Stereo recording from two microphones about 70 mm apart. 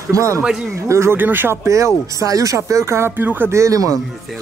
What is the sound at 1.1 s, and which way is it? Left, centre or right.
Speech, right.